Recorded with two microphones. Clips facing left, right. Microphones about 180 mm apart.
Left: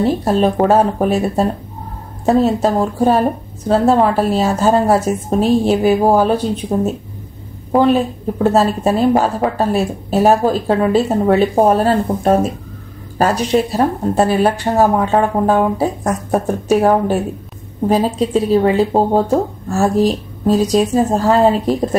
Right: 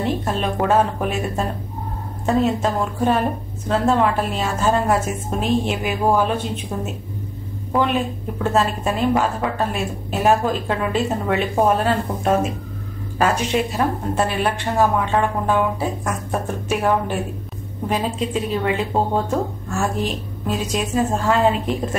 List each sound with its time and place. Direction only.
0.0 s a woman's voice: 35° left (ahead or behind)